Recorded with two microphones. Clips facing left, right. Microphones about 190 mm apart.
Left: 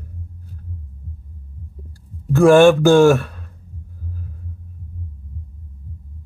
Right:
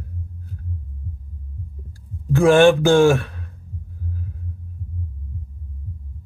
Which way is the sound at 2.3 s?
Centre (ahead or behind).